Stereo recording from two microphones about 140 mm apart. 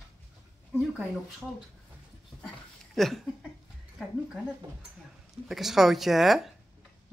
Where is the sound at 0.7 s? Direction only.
5° left (ahead or behind).